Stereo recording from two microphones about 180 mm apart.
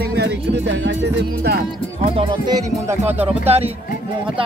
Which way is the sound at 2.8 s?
10° right (ahead or behind).